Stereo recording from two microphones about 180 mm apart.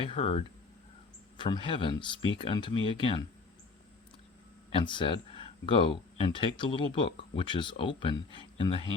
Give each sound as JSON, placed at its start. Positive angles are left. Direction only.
{"t": 0.1, "sound": "speech", "side_deg": 35}
{"t": 4.7, "sound": "speech", "side_deg": 25}